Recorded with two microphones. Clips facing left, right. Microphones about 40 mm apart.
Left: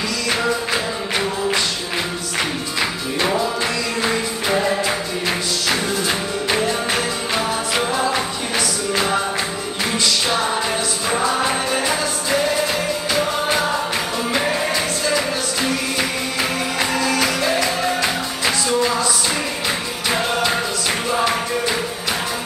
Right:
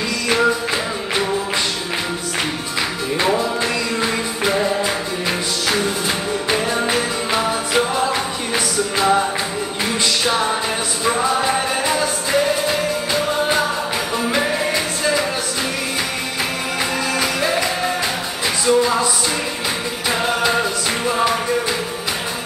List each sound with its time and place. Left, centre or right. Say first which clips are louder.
17.0 s music: even; centre
18.7 s music: right 6 dB; centre